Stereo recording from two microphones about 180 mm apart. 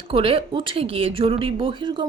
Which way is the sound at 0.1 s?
30° right (ahead or behind).